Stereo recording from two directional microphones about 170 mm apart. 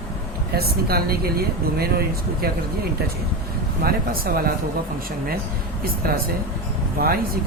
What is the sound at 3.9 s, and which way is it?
Speech, 60° right (ahead or behind).